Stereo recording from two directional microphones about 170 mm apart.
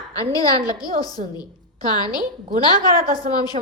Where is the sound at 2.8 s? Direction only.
55° right (ahead or behind).